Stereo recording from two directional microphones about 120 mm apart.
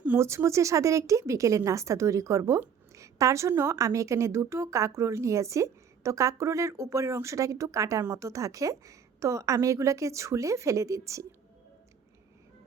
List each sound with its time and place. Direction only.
0.0 s speech: 20° right (ahead or behind)